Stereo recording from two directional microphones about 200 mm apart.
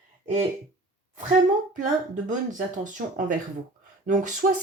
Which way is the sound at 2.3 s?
40° right (ahead or behind).